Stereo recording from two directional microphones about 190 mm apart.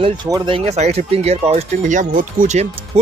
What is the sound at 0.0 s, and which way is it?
Speech, 25° right (ahead or behind).